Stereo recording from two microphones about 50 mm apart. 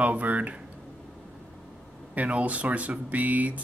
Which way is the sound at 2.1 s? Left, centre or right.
Right.